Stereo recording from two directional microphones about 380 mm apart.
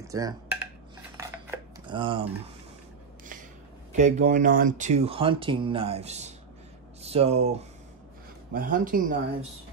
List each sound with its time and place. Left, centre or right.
0.0 s dishes: centre
1.1 s cutlery: centre
3.9 s speech: centre
8.5 s speech: right